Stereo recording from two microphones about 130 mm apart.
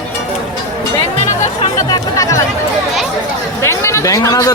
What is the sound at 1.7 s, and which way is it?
Chatter, 30° left (ahead or behind).